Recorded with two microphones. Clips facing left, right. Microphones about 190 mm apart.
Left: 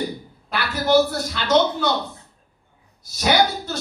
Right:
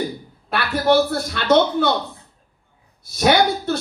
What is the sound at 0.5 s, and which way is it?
A man's voice, 55° right (ahead or behind).